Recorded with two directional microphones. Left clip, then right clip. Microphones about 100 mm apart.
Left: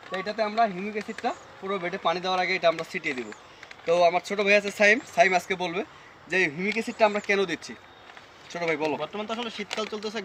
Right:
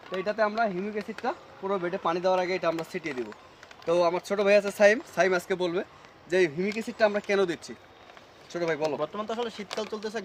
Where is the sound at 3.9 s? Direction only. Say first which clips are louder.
Left 3 dB; 55° right (ahead or behind).